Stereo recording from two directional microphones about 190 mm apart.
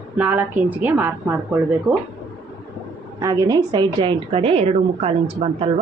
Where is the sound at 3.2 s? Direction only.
20° right (ahead or behind).